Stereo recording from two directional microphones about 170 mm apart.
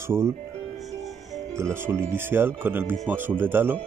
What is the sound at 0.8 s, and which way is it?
Music, centre (ahead or behind).